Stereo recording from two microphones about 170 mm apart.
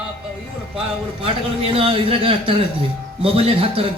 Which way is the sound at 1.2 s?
35° right (ahead or behind).